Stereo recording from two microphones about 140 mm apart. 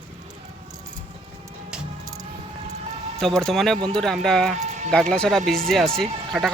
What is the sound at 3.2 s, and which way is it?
Speech, 5° left (ahead or behind).